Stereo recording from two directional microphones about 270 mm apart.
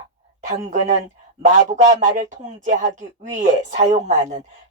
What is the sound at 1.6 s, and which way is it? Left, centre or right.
Speech, right.